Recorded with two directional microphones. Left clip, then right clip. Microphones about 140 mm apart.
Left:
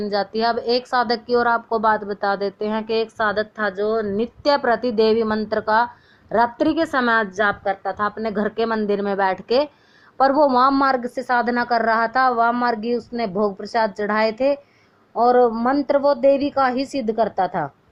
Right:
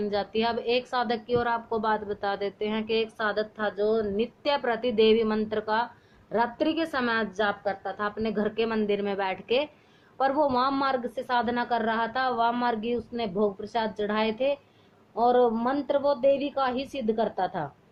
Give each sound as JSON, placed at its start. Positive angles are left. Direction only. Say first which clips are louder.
{"t": 0.0, "sound": "a woman's voice", "louder": "left 6 dB", "side_deg": 65}